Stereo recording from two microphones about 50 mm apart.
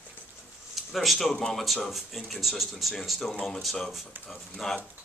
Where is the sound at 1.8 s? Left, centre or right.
Centre.